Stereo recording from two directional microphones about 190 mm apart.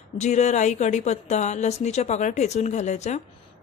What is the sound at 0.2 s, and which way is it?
A woman's voice, 35° left (ahead or behind).